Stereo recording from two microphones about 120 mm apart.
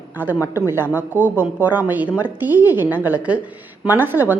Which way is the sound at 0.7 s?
15° right (ahead or behind).